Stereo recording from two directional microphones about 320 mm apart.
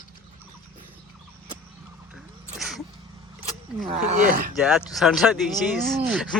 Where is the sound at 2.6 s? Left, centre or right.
Centre.